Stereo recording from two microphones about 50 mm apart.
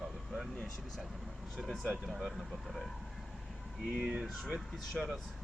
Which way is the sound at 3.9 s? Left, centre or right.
Centre.